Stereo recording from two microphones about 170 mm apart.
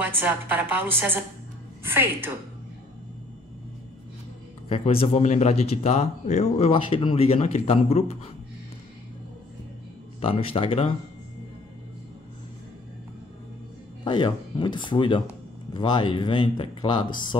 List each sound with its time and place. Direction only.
0.0 s a woman's voice: 10° right (ahead or behind)
4.6 s speech: 35° left (ahead or behind)
10.2 s speech: 35° left (ahead or behind)
14.0 s speech: 25° left (ahead or behind)